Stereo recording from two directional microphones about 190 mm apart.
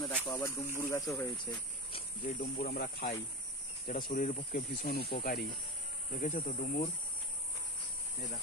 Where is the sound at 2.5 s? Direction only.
50° left (ahead or behind).